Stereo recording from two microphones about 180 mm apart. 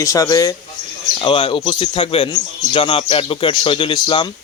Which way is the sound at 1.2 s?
30° left (ahead or behind).